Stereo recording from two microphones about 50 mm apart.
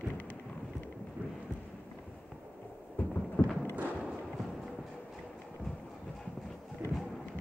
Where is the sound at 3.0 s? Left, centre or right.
Left.